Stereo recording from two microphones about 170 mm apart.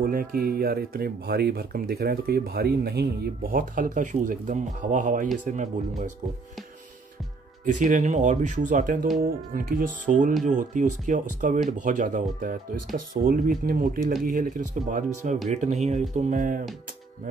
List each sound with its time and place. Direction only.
0.0 s speech: 60° right (ahead or behind)
7.6 s speech: 50° right (ahead or behind)